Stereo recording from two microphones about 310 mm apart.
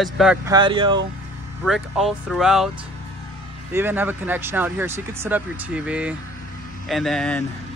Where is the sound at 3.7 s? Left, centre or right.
Centre.